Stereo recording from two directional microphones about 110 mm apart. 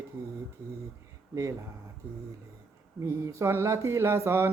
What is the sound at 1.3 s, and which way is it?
Speech, 30° right (ahead or behind).